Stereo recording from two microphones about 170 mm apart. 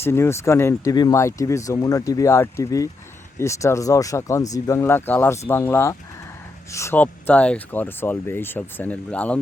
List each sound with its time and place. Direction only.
0.0 s speech: 15° left (ahead or behind)